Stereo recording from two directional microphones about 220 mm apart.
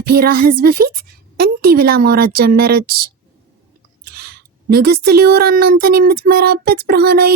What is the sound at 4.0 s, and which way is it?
Speech, 45° right (ahead or behind).